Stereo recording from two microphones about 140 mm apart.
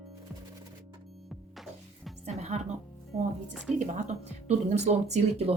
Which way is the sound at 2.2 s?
55° right (ahead or behind).